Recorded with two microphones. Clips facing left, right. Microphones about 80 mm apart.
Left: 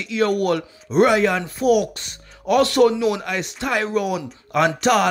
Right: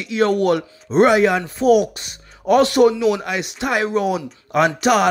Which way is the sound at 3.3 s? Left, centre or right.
Centre.